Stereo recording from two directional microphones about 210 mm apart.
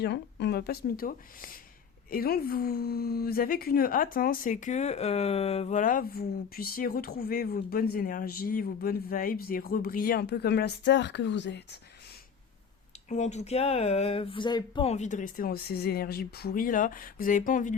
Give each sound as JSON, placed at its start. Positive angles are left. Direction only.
{"t": 0.0, "sound": "a woman's voice", "side_deg": 55}
{"t": 13.1, "sound": "speech", "side_deg": 35}